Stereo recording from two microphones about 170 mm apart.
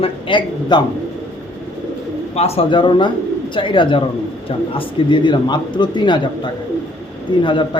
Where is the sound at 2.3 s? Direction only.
35° left (ahead or behind).